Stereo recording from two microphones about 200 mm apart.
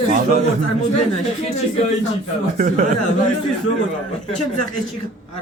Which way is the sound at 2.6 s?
40° right (ahead or behind).